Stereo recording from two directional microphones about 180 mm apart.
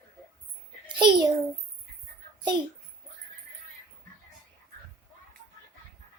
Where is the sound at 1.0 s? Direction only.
25° right (ahead or behind).